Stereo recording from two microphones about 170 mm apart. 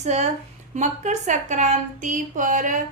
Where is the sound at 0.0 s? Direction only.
40° right (ahead or behind).